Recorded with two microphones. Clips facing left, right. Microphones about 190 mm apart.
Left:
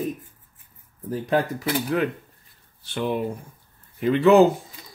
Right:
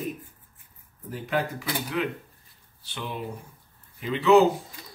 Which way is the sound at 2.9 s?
50° left (ahead or behind).